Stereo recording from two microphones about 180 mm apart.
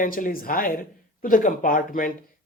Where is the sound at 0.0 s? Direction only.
50° left (ahead or behind).